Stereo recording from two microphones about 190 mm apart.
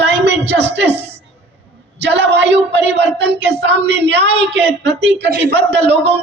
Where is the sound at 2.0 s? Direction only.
65° right (ahead or behind).